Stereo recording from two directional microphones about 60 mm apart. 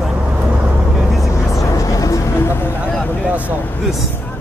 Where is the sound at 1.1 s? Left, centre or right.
Centre.